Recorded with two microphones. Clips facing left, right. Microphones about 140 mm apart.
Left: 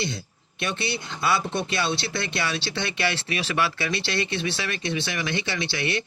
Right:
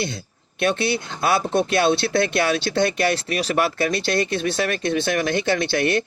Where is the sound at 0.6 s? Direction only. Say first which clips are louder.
Right 8 dB; 55° right (ahead or behind).